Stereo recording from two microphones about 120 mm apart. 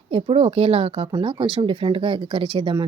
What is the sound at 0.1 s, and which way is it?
Speech, 50° right (ahead or behind).